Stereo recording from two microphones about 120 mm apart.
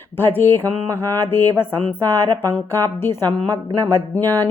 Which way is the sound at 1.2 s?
20° left (ahead or behind).